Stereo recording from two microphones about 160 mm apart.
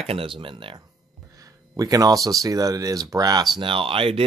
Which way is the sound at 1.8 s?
20° right (ahead or behind).